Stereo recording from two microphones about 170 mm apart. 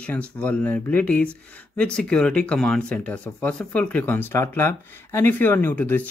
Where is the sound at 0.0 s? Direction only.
10° left (ahead or behind).